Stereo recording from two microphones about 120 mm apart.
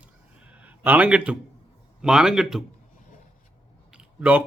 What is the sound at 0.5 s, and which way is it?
A man's voice, 10° right (ahead or behind).